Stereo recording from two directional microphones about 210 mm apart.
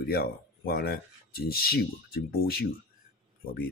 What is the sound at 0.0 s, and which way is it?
Speech, 45° left (ahead or behind).